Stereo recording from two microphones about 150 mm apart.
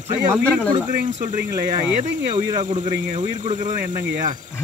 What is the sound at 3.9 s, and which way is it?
Speech, 60° right (ahead or behind).